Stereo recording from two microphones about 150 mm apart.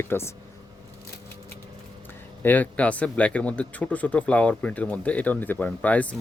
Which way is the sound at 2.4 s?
10° left (ahead or behind).